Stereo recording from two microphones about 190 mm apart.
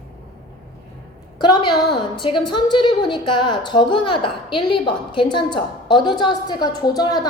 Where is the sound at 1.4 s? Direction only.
20° left (ahead or behind).